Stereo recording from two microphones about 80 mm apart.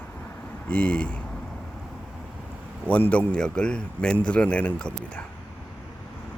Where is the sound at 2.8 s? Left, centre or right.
Centre.